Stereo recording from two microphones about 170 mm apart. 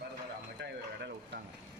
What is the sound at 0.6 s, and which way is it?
Speech, 80° right.